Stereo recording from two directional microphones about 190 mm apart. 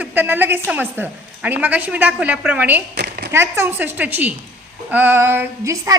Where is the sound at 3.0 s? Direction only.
55° right (ahead or behind).